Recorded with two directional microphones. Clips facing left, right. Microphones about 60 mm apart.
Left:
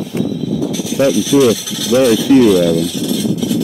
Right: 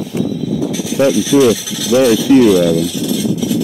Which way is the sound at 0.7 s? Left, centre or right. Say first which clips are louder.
Right 1 dB; right.